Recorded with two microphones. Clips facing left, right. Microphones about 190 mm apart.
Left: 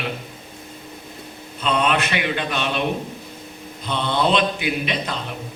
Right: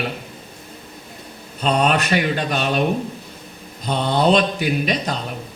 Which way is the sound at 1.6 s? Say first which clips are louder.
Right 2 dB; 40° right (ahead or behind).